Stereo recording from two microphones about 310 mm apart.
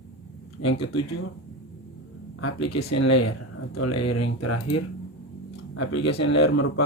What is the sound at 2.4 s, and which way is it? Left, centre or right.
Speech, left.